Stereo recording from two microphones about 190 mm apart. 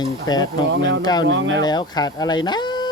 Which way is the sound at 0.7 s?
70° right (ahead or behind).